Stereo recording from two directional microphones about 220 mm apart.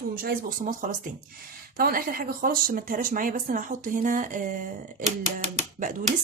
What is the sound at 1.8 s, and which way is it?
Speech, 40° right (ahead or behind).